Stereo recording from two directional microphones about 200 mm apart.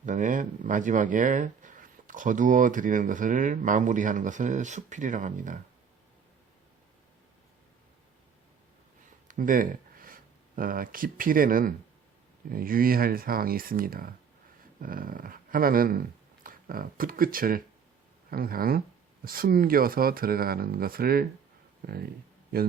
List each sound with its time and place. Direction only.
0.0 s speech: 40° right (ahead or behind)
9.2 s speech: 40° right (ahead or behind)